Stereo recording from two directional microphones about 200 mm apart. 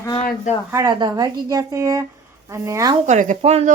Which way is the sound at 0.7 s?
20° right (ahead or behind).